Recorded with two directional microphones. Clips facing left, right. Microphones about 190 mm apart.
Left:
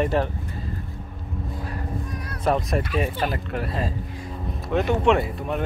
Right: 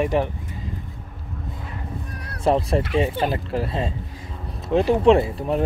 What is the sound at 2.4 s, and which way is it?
Speech, 30° right (ahead or behind).